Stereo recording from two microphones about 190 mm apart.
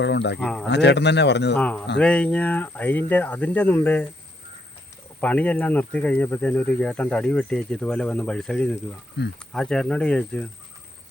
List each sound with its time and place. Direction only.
0.0 s speech: 65° left (ahead or behind)
0.3 s speech: 5° left (ahead or behind)
0.7 s speech: 65° left (ahead or behind)
1.5 s speech: 5° left (ahead or behind)
5.2 s speech: 5° left (ahead or behind)